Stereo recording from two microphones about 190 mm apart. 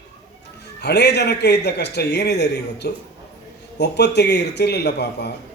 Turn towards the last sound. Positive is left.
turn(degrees=60)  # may be behind; listen again after turning